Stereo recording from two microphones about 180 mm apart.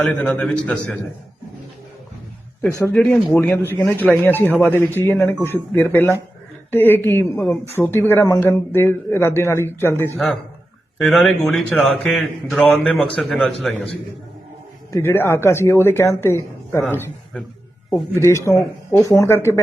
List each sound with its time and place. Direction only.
0.0 s a man's voice: 5° left (ahead or behind)
2.8 s speech: 10° left (ahead or behind)
10.2 s a man's voice: centre (ahead or behind)
14.9 s speech: 10° left (ahead or behind)